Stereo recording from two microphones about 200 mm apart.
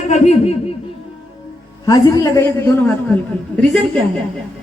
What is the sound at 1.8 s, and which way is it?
Speech, 15° left (ahead or behind).